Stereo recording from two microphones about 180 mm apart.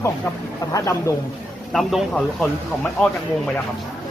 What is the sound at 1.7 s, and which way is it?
A man's voice, centre (ahead or behind).